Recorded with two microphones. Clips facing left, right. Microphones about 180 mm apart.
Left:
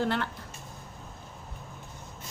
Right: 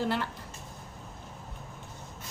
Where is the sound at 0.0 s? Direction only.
5° right (ahead or behind).